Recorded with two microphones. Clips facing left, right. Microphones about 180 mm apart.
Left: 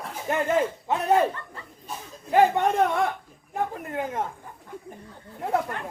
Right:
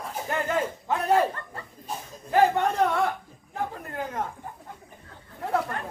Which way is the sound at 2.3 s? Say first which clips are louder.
Left 2 dB; 15° left (ahead or behind).